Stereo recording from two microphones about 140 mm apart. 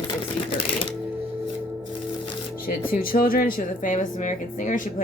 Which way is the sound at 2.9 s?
90° left.